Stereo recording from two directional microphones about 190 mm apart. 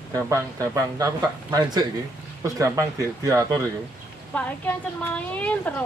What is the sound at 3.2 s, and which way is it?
Speech, 20° right (ahead or behind).